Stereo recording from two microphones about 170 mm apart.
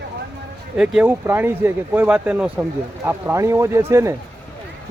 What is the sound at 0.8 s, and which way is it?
Speech, 10° right (ahead or behind).